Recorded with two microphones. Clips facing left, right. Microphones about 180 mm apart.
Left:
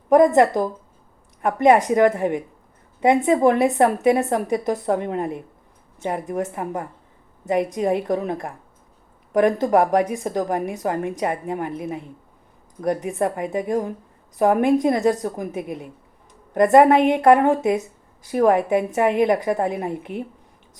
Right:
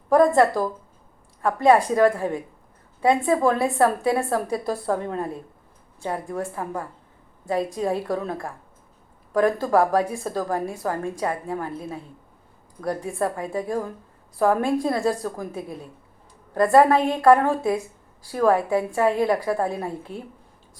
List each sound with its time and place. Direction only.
0.1 s a woman's voice: 20° left (ahead or behind)